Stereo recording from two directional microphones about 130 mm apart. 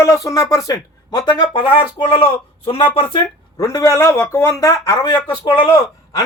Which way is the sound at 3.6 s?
25° left (ahead or behind).